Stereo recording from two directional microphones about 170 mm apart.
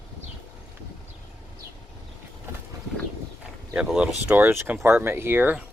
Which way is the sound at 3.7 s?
5° right (ahead or behind).